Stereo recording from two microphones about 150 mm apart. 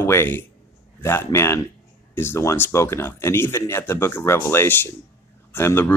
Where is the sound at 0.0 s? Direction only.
15° left (ahead or behind).